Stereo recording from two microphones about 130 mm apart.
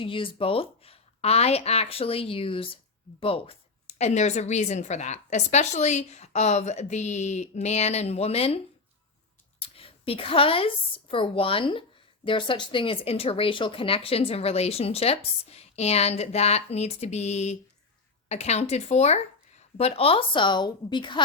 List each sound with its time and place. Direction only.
0.0 s a woman's voice: 40° left (ahead or behind)